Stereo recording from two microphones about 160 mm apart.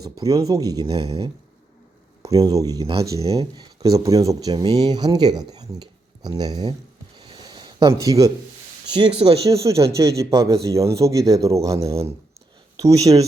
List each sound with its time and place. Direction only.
0.0 s speech: 20° right (ahead or behind)
7.2 s a sound: 30° right (ahead or behind)
8.9 s speech: 30° right (ahead or behind)
9.5 s speech: 20° right (ahead or behind)